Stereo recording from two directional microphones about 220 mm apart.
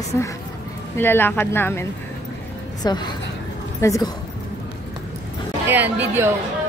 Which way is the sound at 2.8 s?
20° left (ahead or behind).